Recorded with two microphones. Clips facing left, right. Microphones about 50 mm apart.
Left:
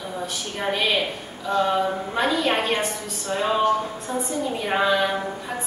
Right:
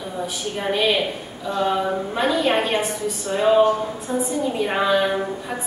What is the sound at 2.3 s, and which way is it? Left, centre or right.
A woman's voice, centre.